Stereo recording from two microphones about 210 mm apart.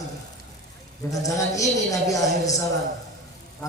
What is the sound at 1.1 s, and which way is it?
Speech, 15° left (ahead or behind).